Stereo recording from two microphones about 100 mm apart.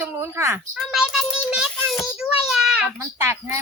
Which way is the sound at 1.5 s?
Centre (ahead or behind).